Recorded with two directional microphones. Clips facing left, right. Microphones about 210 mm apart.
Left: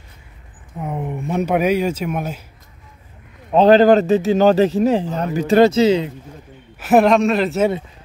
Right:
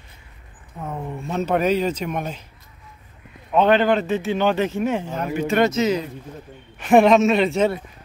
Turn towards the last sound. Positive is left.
turn(degrees=5)  # may be behind; listen again after turning